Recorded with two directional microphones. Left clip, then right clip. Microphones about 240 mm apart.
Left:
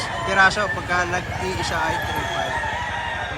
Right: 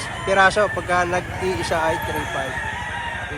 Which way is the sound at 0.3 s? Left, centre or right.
Centre.